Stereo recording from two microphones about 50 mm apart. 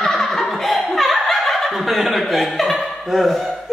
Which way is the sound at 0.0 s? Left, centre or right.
Centre.